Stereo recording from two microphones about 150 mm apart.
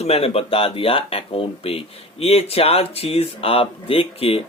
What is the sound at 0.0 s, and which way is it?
Speech, 40° left (ahead or behind).